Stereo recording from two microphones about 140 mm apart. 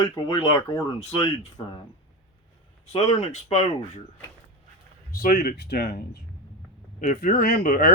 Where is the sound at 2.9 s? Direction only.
50° left (ahead or behind).